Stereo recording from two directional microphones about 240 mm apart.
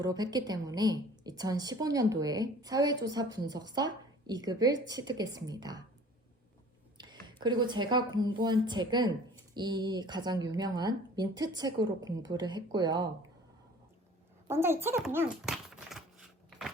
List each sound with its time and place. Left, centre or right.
0.0 s a woman's voice: centre
7.0 s a woman's voice: centre
14.4 s a sound: centre